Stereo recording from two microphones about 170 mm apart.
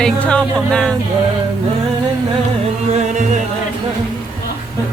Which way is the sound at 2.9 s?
45° right (ahead or behind).